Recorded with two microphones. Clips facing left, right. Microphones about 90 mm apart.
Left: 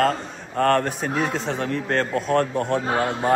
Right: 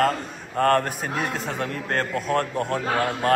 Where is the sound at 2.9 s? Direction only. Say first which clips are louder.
Right 2 dB; 20° left (ahead or behind).